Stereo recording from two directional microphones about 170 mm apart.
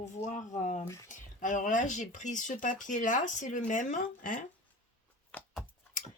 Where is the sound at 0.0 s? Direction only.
45° left (ahead or behind).